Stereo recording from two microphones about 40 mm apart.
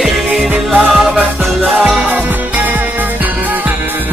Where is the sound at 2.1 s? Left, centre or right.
Right.